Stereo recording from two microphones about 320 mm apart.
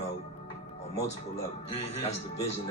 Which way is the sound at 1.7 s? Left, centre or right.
Centre.